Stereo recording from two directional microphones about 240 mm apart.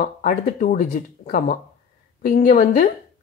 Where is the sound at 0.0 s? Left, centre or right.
Left.